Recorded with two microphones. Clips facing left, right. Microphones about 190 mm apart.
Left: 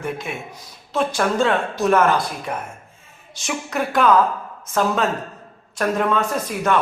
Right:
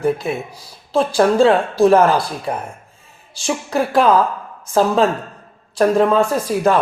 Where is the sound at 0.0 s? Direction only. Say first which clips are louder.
Right 9 dB; 35° right (ahead or behind).